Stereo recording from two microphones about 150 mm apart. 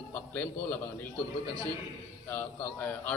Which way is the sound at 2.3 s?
10° left (ahead or behind).